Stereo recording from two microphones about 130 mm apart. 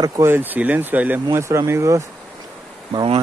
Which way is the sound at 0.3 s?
15° right (ahead or behind).